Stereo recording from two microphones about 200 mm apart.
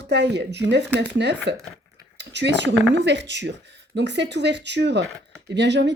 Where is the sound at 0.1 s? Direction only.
55° right (ahead or behind).